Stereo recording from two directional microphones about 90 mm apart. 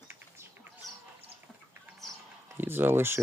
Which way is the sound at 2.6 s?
25° right (ahead or behind).